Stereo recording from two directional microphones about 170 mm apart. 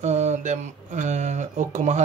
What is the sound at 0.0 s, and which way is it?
Speech, 40° right (ahead or behind).